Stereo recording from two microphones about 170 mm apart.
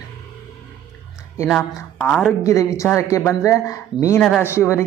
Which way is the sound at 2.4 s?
20° left (ahead or behind).